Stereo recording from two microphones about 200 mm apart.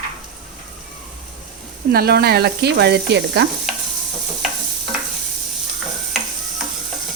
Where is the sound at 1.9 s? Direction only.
50° right (ahead or behind).